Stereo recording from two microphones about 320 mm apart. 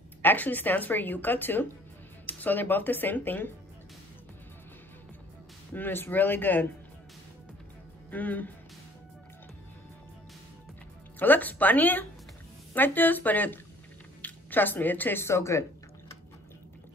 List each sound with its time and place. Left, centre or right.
0.2 s a woman's voice: centre
5.7 s speech: centre
8.1 s a woman's voice: centre
11.1 s a woman's voice: centre